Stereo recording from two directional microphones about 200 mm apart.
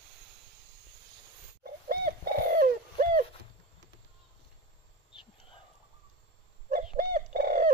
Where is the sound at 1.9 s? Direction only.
45° right (ahead or behind).